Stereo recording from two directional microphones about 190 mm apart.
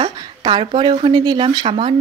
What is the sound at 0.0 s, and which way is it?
Speech, 25° right (ahead or behind).